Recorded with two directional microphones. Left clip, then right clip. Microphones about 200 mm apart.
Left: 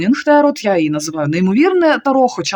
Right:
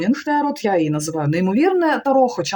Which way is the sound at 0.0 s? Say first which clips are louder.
Left 8 dB; 45° left (ahead or behind).